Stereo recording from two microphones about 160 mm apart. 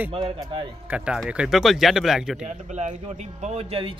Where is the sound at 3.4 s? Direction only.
35° right (ahead or behind).